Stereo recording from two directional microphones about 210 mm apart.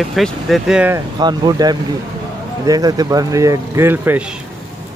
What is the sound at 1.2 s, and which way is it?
Speech, 20° right (ahead or behind).